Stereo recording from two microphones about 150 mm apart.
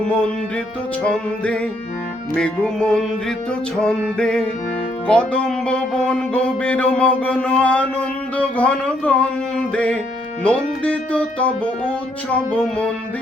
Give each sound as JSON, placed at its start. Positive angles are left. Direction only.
{"t": 1.0, "sound": "music", "side_deg": 5}